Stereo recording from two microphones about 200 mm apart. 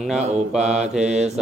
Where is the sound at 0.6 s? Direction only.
35° right (ahead or behind).